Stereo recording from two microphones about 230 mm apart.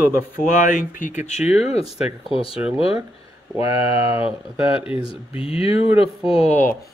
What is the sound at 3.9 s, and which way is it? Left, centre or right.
Speech, left.